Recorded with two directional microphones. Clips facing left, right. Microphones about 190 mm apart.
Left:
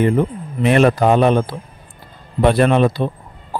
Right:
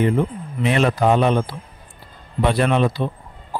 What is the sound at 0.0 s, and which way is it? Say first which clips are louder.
A man's voice: left 3 dB; 50° left (ahead or behind).